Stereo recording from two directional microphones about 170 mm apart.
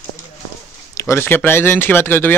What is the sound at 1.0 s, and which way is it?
Speech, 15° left (ahead or behind).